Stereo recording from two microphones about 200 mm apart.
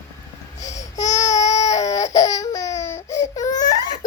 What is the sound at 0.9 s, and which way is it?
Baby cry, 20° left (ahead or behind).